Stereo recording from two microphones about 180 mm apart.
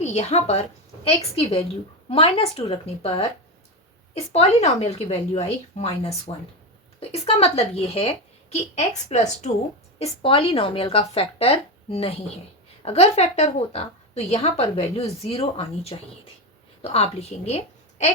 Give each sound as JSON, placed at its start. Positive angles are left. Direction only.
{"t": 0.0, "sound": "a woman's voice", "side_deg": 35}